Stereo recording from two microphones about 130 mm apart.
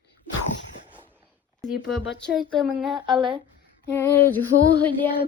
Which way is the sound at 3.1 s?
40° right (ahead or behind).